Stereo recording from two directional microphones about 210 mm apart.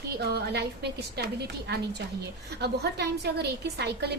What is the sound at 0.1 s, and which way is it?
A woman's voice, 50° right (ahead or behind).